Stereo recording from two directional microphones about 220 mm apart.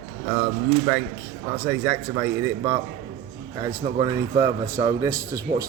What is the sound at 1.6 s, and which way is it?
Speech, 15° right (ahead or behind).